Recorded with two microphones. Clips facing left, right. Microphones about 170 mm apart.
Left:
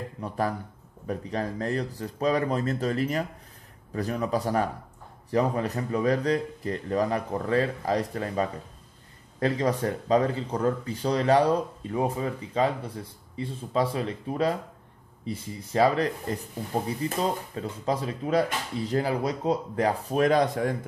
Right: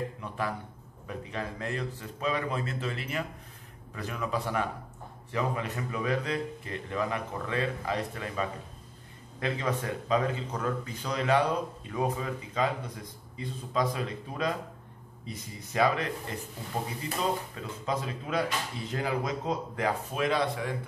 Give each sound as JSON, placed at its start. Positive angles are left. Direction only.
{"t": 0.2, "sound": "speech", "side_deg": 40}